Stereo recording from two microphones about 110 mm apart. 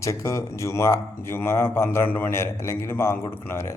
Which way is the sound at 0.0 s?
30° left (ahead or behind).